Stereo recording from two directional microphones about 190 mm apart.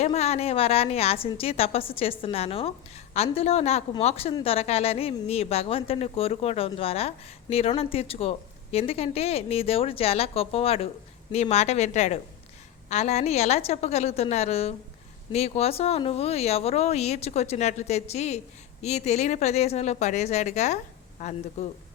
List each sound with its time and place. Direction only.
0.0 s a woman's voice: 35° left (ahead or behind)